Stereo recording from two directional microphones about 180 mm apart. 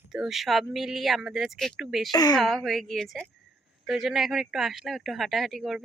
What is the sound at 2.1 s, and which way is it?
Speech, 20° left (ahead or behind).